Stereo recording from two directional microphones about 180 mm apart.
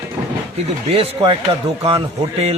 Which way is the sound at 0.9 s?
35° right (ahead or behind).